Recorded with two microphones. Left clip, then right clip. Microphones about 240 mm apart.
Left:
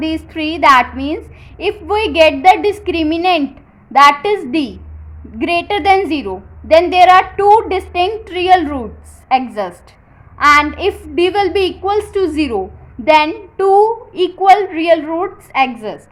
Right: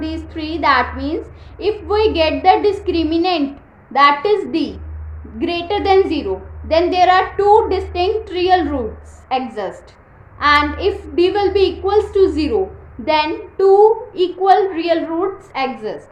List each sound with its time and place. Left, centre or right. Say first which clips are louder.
0.0 s a woman's voice: left 6 dB; left